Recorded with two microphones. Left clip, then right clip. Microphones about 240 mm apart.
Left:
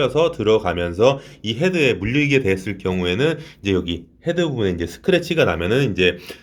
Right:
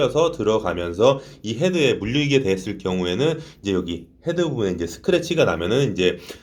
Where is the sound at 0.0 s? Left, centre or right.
Left.